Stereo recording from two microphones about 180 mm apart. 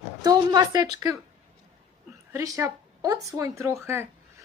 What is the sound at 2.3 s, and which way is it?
A woman's voice, 15° right (ahead or behind).